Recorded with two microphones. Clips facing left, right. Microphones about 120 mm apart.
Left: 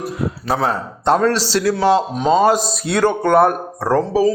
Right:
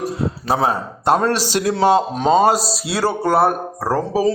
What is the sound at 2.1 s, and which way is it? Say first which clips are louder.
Speech: even; 35° right (ahead or behind).